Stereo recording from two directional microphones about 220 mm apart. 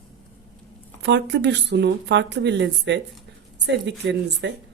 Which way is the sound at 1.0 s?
50° right (ahead or behind).